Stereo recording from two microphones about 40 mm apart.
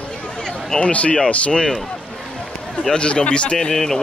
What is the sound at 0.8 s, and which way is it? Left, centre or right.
Speech, left.